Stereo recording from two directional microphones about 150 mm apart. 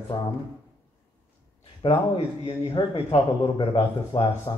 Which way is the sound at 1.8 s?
35° left (ahead or behind).